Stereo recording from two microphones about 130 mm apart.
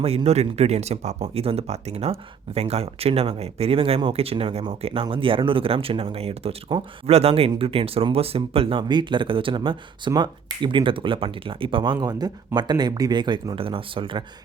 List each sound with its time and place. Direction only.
0.0 s speech: 50° right (ahead or behind)